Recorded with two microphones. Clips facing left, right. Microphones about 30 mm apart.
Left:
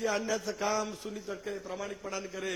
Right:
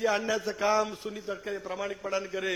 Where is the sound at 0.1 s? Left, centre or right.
Right.